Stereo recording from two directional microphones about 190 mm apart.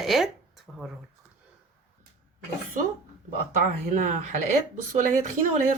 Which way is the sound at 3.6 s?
40° right (ahead or behind).